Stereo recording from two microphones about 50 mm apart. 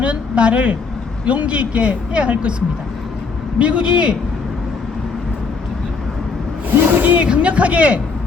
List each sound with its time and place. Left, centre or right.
0.0 s speech: right
3.6 s speech: right
6.7 s a sound: right
7.3 s speech: right